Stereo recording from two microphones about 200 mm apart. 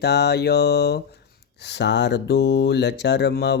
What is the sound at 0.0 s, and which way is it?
Mantra, 55° left (ahead or behind).